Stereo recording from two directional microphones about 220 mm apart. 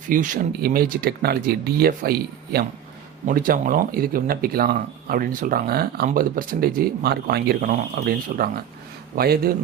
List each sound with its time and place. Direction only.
0.1 s speech: 40° right (ahead or behind)